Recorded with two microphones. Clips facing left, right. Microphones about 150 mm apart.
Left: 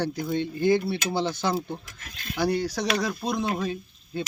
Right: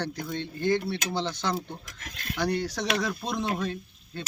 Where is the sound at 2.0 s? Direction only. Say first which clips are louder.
Right 1 dB; 60° right (ahead or behind).